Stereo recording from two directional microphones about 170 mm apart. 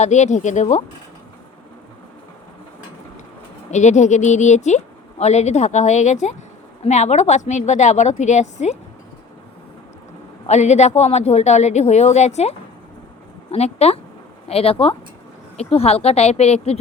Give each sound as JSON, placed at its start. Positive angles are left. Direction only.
{"t": 0.0, "sound": "a woman's voice", "side_deg": 45}
{"t": 3.7, "sound": "a woman's voice", "side_deg": 45}
{"t": 10.4, "sound": "a woman's voice", "side_deg": 40}